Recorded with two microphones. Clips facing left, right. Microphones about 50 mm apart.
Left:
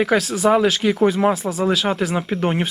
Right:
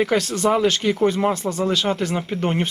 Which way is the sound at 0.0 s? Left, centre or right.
Centre.